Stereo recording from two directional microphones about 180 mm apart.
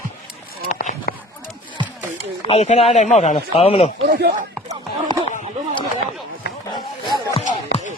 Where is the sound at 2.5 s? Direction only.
35° left (ahead or behind).